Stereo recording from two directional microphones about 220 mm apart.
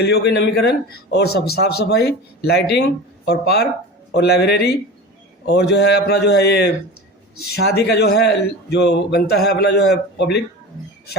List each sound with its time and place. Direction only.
0.0 s a man's voice: 50° left (ahead or behind)